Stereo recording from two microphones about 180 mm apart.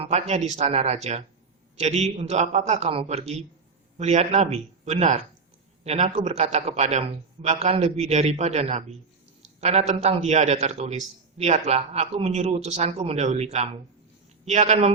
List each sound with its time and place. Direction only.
0.0 s a man's voice: 35° right (ahead or behind)